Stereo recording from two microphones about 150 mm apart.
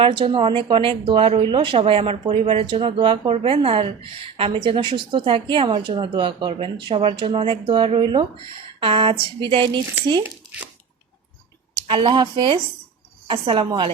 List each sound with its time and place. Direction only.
0.0 s a woman's voice: 35° right (ahead or behind)
11.9 s a woman's voice: 35° right (ahead or behind)